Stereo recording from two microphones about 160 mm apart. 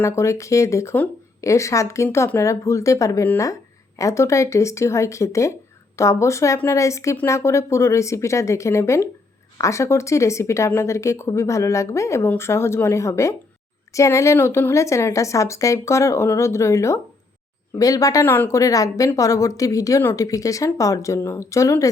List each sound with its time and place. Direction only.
0.0 s speech: 20° left (ahead or behind)